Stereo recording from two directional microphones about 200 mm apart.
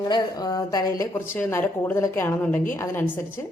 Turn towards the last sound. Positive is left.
turn(degrees=10)  # may be behind; listen again after turning